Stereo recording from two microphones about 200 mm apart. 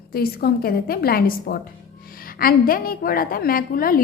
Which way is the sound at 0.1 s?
50° left (ahead or behind).